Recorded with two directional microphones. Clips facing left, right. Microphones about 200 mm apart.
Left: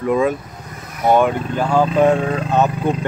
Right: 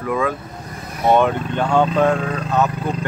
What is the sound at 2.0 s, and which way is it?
Speech, 25° left (ahead or behind).